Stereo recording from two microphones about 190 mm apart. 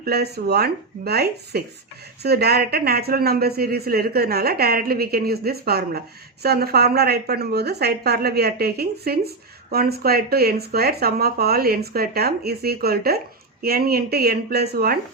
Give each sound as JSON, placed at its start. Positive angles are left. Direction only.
{"t": 0.0, "sound": "a woman's voice", "side_deg": -55}